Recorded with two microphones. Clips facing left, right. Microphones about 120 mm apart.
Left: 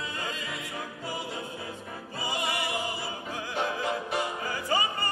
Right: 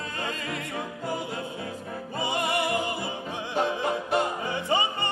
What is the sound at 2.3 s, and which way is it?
Music, 55° right (ahead or behind).